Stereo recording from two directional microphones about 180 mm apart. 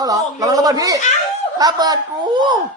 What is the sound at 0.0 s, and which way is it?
A woman's voice, 20° right (ahead or behind).